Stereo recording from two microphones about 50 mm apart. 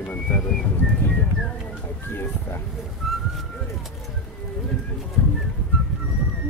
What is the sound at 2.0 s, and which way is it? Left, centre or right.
Speech, left.